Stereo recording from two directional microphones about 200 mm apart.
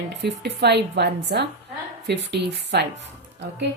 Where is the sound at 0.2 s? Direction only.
55° right (ahead or behind).